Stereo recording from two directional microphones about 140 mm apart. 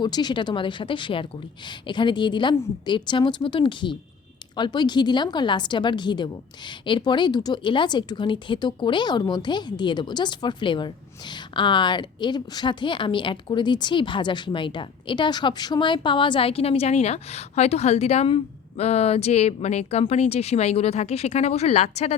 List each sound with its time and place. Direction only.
0.0 s a woman's voice: 30° left (ahead or behind); by 22.1 s 50° left (ahead or behind)